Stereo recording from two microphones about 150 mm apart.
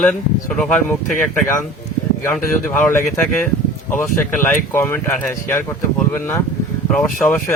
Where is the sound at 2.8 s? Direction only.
15° left (ahead or behind).